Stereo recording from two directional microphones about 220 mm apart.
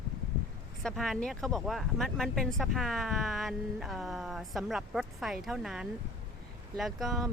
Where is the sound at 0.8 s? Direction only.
Centre (ahead or behind).